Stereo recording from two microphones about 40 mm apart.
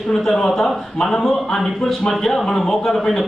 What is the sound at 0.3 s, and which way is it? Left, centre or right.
A man's voice, centre.